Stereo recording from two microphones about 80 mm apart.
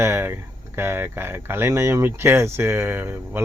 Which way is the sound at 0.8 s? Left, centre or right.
Right.